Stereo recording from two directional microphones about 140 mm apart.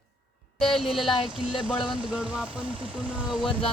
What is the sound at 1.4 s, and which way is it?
Speech, 5° right (ahead or behind).